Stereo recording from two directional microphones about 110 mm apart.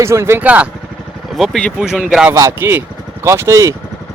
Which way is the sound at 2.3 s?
25° right (ahead or behind).